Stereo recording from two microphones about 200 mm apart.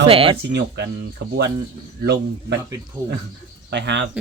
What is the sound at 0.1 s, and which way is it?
Speech, 30° right (ahead or behind).